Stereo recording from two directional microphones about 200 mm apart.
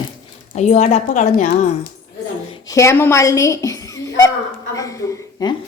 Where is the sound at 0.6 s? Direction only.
35° left (ahead or behind).